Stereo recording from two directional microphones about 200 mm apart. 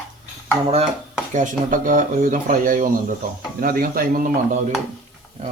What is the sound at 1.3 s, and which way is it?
Speech, 40° right (ahead or behind).